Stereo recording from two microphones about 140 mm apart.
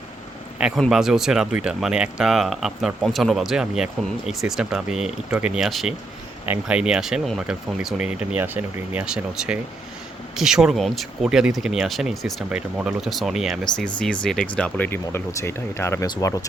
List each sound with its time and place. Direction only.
0.8 s speech: centre (ahead or behind); by 16.5 s 25° left (ahead or behind)